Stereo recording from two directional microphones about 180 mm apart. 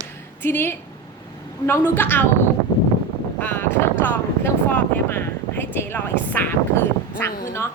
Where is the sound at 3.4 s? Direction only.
10° left (ahead or behind).